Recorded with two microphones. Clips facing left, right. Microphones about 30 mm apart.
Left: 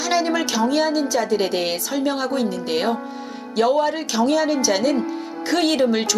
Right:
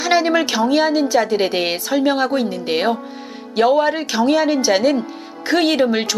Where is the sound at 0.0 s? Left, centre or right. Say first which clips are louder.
Right 4 dB; right.